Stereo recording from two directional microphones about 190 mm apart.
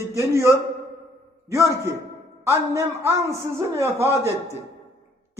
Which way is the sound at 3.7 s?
15° right (ahead or behind).